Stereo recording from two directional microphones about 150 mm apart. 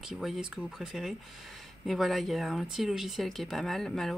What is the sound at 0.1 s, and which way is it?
Speech, centre (ahead or behind).